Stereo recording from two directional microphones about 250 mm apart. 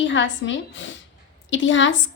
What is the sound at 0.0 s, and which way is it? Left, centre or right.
A woman's voice, left.